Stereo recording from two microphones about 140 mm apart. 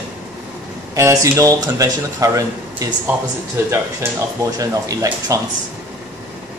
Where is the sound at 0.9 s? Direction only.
20° right (ahead or behind).